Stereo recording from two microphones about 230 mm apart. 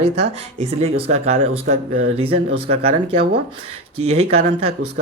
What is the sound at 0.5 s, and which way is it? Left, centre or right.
Speech, right.